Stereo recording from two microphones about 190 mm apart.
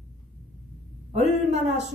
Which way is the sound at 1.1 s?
35° right (ahead or behind).